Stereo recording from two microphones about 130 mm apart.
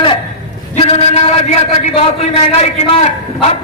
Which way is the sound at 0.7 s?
55° left (ahead or behind).